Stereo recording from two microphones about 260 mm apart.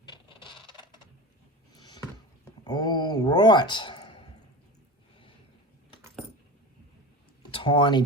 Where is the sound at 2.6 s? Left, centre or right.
Centre.